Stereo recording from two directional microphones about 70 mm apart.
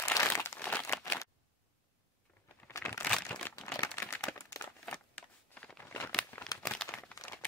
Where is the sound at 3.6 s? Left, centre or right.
Left.